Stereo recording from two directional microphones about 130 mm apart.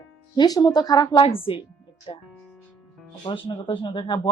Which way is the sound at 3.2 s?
40° left (ahead or behind).